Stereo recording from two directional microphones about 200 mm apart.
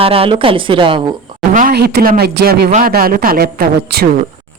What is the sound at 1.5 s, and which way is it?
Speech, 45° right (ahead or behind).